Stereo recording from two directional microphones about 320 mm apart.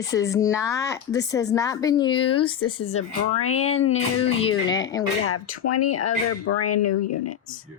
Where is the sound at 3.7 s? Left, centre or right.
Centre.